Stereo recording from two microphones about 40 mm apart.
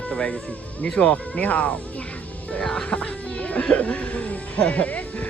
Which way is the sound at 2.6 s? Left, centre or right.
Centre.